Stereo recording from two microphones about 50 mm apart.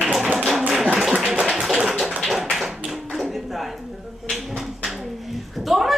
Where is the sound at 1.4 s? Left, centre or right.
Centre.